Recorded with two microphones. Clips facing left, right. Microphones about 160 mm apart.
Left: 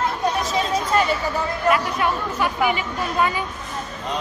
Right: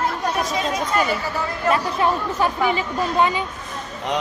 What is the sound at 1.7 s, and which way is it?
Speech, 30° right (ahead or behind).